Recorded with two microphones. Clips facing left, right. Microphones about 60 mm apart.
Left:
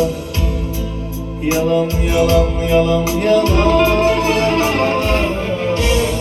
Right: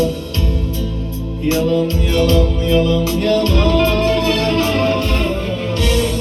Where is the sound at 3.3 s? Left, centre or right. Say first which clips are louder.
Left 3 dB; centre.